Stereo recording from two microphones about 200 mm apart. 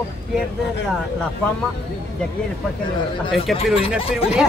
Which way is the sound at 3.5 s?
Centre (ahead or behind).